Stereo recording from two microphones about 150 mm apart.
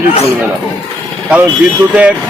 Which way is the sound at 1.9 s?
10° right (ahead or behind).